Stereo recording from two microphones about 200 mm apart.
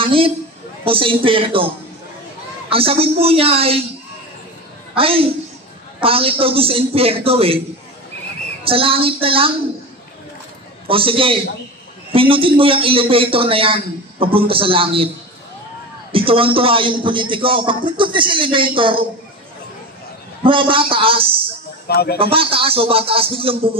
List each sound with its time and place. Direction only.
0.0 s a woman's voice: 25° right (ahead or behind)
2.7 s a man's voice: 30° right (ahead or behind)
4.9 s a woman's voice: 30° right (ahead or behind)
8.6 s a man's voice: 30° right (ahead or behind)
10.9 s a man's voice: 25° right (ahead or behind)
16.1 s a man's voice: 25° right (ahead or behind)
20.4 s a man's voice: 25° right (ahead or behind)
21.8 s a man's voice: 50° left (ahead or behind)
22.2 s a man's voice: 25° right (ahead or behind)